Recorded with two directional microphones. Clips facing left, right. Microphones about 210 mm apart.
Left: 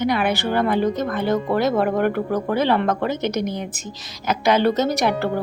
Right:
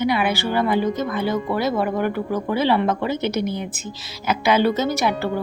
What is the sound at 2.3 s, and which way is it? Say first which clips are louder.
A woman's voice: right 2 dB; 10° right (ahead or behind).